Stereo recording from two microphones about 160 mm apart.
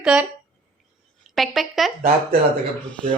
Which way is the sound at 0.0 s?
5° right (ahead or behind).